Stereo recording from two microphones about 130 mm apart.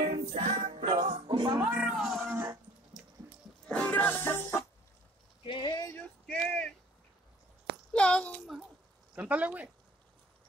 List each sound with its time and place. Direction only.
0.1 s music: 65° right (ahead or behind)
1.1 s music: 35° right (ahead or behind)
1.6 s speech: 15° right (ahead or behind)
3.6 s music: 5° left (ahead or behind)
5.4 s a sound: 40° left (ahead or behind)
5.9 s male singing: 10° left (ahead or behind)
7.9 s a sound: 10° left (ahead or behind)
9.1 s speech: 10° right (ahead or behind)